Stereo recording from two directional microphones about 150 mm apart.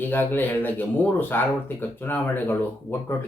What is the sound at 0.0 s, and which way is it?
Speech, 15° left (ahead or behind).